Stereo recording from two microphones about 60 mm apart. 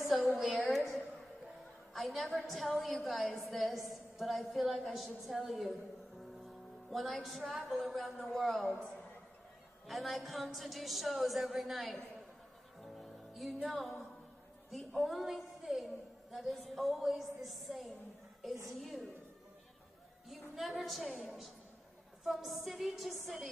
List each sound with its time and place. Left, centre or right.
0.4 s a sound: centre
2.0 s a woman's voice: centre
6.9 s a woman's voice: centre
8.6 s a woman's voice: centre
9.8 s a woman's voice: centre
12.8 s music: centre
14.9 s a woman's voice: centre
20.2 s a woman's voice: centre